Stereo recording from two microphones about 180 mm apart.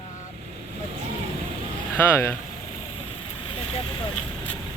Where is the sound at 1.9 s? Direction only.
15° left (ahead or behind).